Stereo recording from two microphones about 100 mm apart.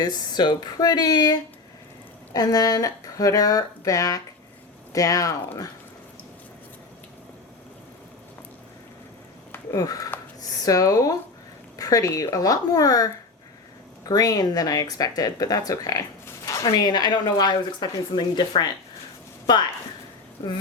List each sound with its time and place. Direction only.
0.0 s speech: 45° left (ahead or behind)
9.7 s speech: 35° left (ahead or behind)
14.1 s speech: 40° left (ahead or behind)